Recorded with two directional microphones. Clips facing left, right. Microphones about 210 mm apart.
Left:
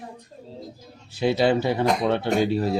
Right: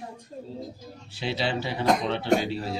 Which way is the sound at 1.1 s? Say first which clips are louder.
Left 9 dB; 50° left (ahead or behind).